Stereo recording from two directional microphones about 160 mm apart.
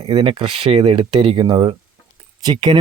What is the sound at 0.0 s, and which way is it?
Speech, 40° right (ahead or behind).